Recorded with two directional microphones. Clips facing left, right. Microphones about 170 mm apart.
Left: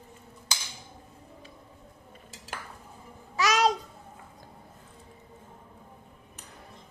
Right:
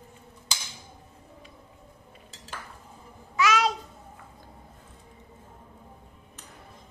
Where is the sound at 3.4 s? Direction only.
40° left (ahead or behind).